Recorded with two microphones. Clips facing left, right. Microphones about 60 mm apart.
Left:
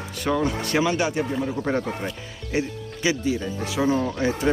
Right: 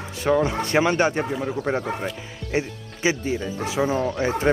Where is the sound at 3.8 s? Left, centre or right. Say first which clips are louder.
Left 1 dB; centre.